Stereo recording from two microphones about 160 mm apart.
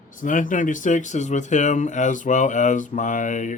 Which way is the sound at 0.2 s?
55° left (ahead or behind).